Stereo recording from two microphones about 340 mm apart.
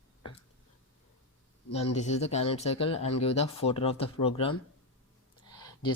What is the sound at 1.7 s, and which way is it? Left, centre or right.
Speech, centre.